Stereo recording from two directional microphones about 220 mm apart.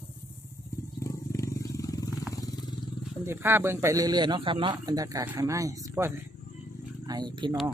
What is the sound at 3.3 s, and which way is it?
A man's voice, 10° right (ahead or behind).